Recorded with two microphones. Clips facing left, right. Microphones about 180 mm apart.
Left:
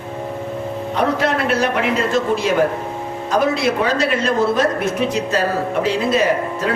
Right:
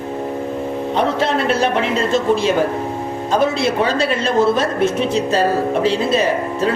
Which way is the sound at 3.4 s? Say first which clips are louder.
Even; 30° right (ahead or behind).